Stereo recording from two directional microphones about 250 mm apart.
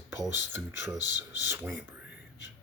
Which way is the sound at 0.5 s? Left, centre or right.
Centre.